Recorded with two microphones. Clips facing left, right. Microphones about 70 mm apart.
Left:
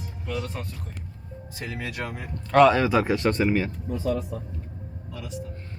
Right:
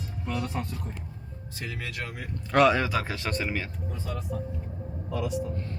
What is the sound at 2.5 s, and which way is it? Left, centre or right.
Speech, centre.